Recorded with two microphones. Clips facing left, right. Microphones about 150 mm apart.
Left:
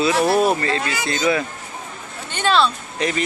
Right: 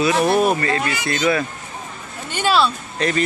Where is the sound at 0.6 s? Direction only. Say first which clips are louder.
Right 1 dB; 25° left (ahead or behind).